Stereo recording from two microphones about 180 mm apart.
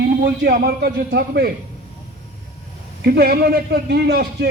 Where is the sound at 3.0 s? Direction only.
60° right (ahead or behind).